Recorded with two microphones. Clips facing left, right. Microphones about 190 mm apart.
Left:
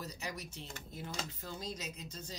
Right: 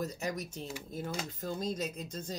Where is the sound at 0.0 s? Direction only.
45° right (ahead or behind).